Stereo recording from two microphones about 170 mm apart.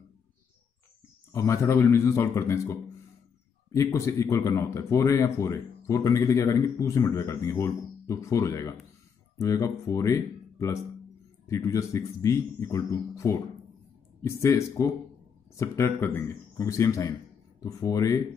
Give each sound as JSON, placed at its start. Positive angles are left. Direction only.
{"t": 1.3, "sound": "speech", "side_deg": 15}